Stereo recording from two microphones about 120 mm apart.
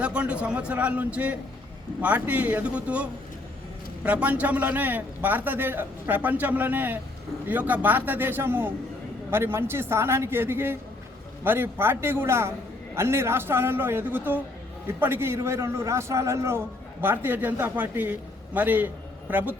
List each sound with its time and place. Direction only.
0.0 s a man's voice: 10° right (ahead or behind)